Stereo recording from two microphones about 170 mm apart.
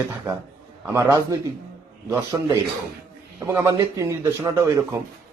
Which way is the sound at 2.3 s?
15° right (ahead or behind).